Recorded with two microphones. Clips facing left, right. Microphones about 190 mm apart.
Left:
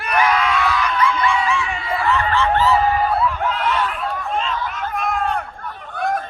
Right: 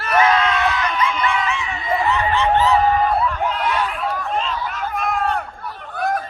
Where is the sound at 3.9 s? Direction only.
Centre (ahead or behind).